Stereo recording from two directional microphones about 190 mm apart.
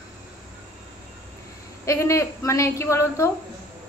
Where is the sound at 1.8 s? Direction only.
15° left (ahead or behind).